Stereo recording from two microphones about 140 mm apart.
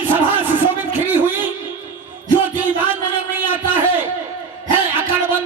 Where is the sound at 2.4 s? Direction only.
15° right (ahead or behind).